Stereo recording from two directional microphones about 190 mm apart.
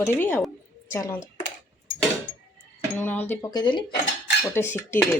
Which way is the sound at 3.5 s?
20° left (ahead or behind).